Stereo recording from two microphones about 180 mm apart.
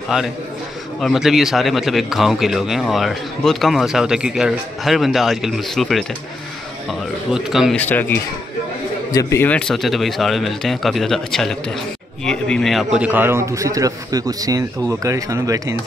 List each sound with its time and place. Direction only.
1.0 s a man's voice: centre (ahead or behind)
7.8 s a man's voice: 10° left (ahead or behind); by 15.7 s 20° right (ahead or behind)